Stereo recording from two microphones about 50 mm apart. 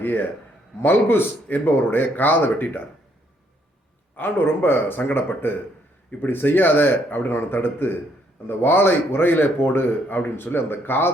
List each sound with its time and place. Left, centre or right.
0.0 s a man's voice: left
4.2 s a man's voice: left